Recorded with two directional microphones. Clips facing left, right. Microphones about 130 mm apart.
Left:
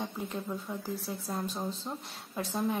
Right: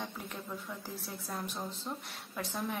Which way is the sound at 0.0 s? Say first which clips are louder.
Left 6 dB; 25° left (ahead or behind).